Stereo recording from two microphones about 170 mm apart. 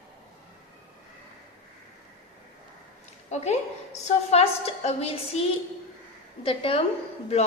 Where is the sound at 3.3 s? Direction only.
40° left (ahead or behind).